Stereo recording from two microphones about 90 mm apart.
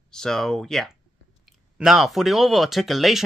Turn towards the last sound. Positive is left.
turn(degrees=0)  # may be behind; listen again after turning